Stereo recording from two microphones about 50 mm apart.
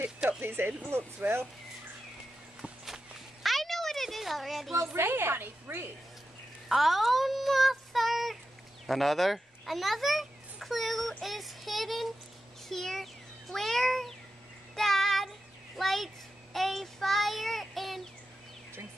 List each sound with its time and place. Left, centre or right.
0.4 s speech: right
3.4 s a sound: centre
4.9 s a woman's voice: right
6.7 s a child's voice: centre
14.8 s child singing: centre